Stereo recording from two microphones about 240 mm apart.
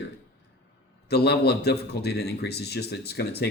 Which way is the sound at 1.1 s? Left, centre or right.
Left.